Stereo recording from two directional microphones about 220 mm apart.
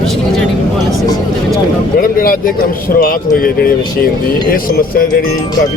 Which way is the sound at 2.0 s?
40° left (ahead or behind).